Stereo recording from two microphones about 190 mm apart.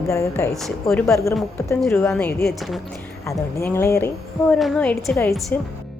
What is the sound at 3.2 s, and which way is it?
Speech, 15° left (ahead or behind).